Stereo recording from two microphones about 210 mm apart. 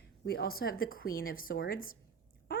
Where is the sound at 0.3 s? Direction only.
45° left (ahead or behind).